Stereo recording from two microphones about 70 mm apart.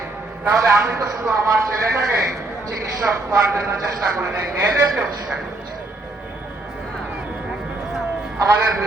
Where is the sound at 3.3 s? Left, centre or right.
Right.